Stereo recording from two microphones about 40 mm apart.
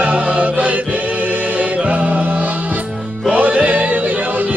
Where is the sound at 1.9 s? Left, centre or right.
Right.